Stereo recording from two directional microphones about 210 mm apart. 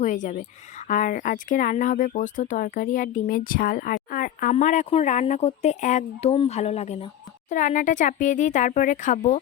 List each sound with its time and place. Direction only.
0.0 s speech: 35° left (ahead or behind)